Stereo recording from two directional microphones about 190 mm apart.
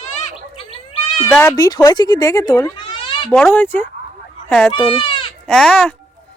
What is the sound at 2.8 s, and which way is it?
Cat, 25° left (ahead or behind).